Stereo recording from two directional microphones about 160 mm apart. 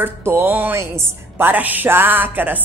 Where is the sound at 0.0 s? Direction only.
15° right (ahead or behind).